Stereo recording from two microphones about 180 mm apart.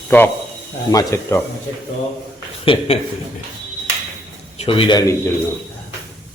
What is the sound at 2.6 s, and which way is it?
Speech, 35° left (ahead or behind).